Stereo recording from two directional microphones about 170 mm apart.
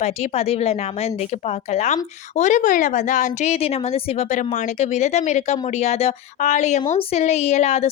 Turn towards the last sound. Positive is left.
turn(degrees=40)  # may be behind; listen again after turning